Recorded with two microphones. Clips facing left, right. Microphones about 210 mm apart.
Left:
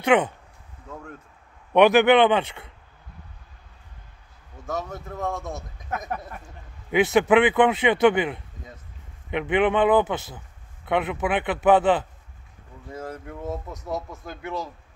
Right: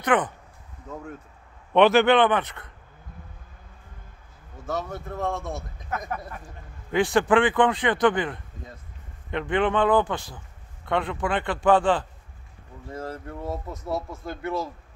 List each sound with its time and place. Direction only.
0.0 s a man's voice: 10° left (ahead or behind)
1.7 s a man's voice: 15° left (ahead or behind)
4.6 s speech: centre (ahead or behind)
6.9 s a man's voice: 20° left (ahead or behind)
12.9 s speech: centre (ahead or behind)